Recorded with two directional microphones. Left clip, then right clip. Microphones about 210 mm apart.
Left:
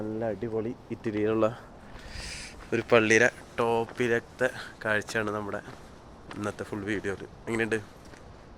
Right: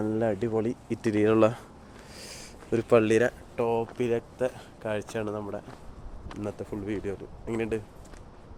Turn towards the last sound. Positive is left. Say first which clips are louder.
# left 2 dB
turn(degrees=0)  # may be behind; listen again after turning